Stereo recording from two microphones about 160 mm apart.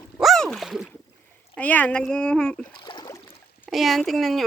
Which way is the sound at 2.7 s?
30° left (ahead or behind).